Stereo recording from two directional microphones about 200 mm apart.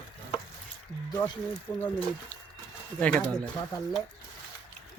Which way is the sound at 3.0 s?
5° left (ahead or behind).